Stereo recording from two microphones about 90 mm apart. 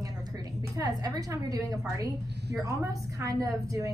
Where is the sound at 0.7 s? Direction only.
45° right (ahead or behind).